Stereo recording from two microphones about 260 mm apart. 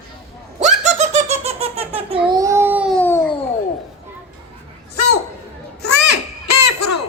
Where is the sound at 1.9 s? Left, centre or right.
Right; by 3.3 s centre.